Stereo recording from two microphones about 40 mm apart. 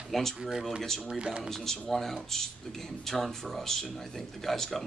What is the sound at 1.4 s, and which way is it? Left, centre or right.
Speech, centre.